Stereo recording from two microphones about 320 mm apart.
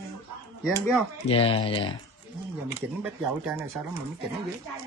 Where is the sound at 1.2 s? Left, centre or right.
Centre.